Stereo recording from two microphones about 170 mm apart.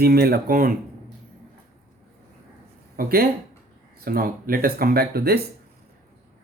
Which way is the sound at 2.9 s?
60° right (ahead or behind).